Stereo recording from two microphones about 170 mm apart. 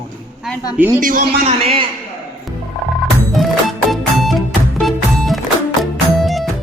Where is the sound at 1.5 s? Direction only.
35° right (ahead or behind).